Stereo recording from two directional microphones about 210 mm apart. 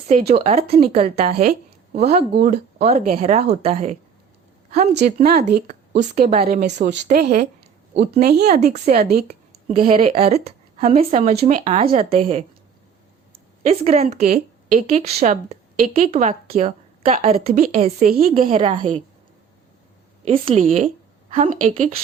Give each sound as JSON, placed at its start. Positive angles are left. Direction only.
{"t": 0.1, "sound": "speech", "side_deg": -30}
{"t": 1.3, "sound": "speech", "side_deg": -45}
{"t": 5.1, "sound": "speech", "side_deg": -35}
{"t": 6.0, "sound": "speech", "side_deg": -45}
{"t": 6.3, "sound": "speech", "side_deg": -30}
{"t": 6.8, "sound": "speech", "side_deg": -55}
{"t": 9.8, "sound": "speech", "side_deg": -25}
{"t": 13.7, "sound": "speech", "side_deg": -30}
{"t": 17.4, "sound": "speech", "side_deg": -45}
{"t": 18.4, "sound": "speech", "side_deg": -25}
{"t": 20.2, "sound": "a woman's voice", "side_deg": -25}